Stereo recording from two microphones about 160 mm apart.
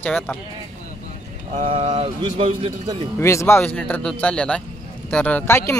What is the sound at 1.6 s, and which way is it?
Speech, 35° right (ahead or behind).